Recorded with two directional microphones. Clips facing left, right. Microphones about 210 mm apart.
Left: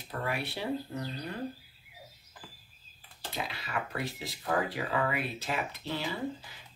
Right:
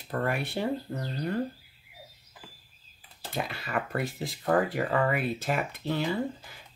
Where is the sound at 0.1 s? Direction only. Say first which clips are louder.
Right 5 dB; 50° right (ahead or behind).